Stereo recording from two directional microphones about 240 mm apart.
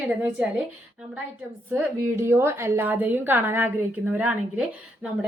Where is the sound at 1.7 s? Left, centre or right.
Centre.